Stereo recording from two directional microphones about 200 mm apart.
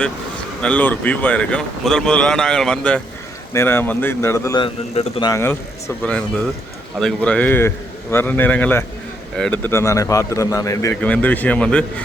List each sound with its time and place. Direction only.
0.6 s a man's voice: 5° left (ahead or behind)
4.6 s speech: 25° left (ahead or behind)
5.3 s a man's voice: 10° left (ahead or behind)